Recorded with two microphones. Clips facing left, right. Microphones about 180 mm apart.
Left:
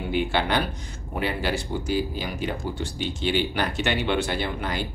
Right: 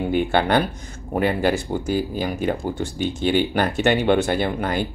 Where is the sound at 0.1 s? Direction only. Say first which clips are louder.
Right 4 dB; 50° right (ahead or behind).